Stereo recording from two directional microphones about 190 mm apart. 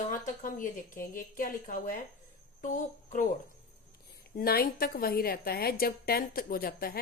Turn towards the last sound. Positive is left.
turn(degrees=50)  # may be behind; listen again after turning